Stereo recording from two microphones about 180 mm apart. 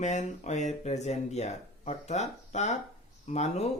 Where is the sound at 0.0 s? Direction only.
40° left (ahead or behind).